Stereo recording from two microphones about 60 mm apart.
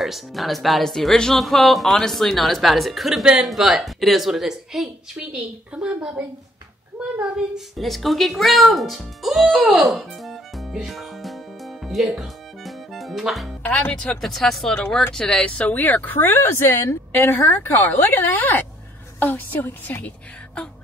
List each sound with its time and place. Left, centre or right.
0.0 s speech: centre
5.3 s a woman's voice: centre
7.7 s speech: centre
13.7 s a woman's voice: left
14.0 s speech: centre
15.7 s a woman's voice: left